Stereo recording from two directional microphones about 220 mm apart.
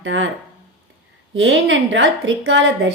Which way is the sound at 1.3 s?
55° right (ahead or behind).